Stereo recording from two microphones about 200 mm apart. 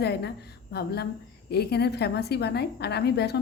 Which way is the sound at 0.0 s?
55° left (ahead or behind).